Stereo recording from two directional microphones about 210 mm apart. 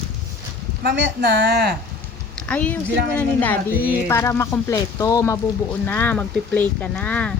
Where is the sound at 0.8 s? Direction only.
50° right (ahead or behind).